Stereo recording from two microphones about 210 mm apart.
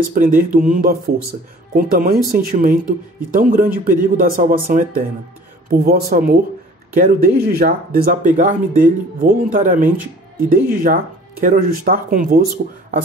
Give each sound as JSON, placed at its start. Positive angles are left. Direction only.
{"t": 0.1, "sound": "speech", "side_deg": -40}